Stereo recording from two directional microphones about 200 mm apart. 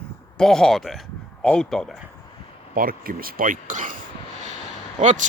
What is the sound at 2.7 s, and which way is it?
Speech, 45° right (ahead or behind).